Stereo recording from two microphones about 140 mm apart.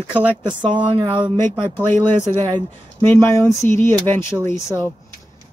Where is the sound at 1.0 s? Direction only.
35° right (ahead or behind).